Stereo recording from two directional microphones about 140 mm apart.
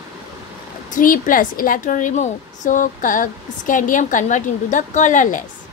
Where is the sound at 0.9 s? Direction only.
75° left (ahead or behind).